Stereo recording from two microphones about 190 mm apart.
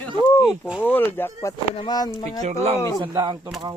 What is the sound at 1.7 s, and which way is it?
Speech, 25° left (ahead or behind).